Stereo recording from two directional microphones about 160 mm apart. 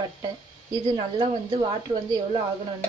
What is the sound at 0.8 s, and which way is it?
Speech, 30° right (ahead or behind).